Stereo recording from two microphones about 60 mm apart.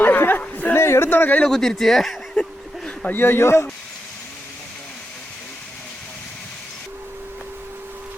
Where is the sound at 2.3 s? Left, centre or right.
Centre.